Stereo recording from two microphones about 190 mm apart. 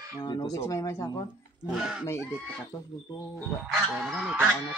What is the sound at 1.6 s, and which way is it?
Speech, 5° right (ahead or behind).